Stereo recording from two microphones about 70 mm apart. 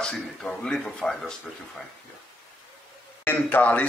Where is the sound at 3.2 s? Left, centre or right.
Left.